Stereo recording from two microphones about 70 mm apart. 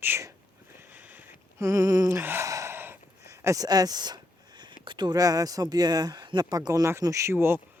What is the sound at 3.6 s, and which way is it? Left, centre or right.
Speech, right.